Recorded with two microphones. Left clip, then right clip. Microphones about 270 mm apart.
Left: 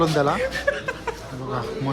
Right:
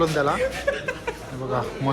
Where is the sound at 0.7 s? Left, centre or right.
Left.